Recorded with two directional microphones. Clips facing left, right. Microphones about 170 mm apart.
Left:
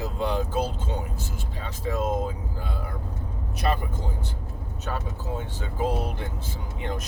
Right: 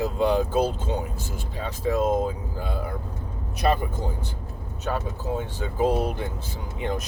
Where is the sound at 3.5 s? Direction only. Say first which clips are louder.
Right 4 dB; 15° right (ahead or behind).